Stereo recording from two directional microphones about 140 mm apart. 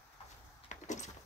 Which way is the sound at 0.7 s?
60° left (ahead or behind).